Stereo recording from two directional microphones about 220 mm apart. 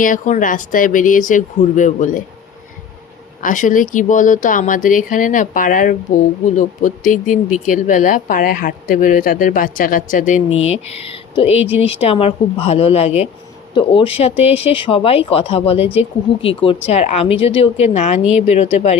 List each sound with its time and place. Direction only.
0.0 s a woman's voice: 35° left (ahead or behind)
3.4 s a woman's voice: 35° left (ahead or behind)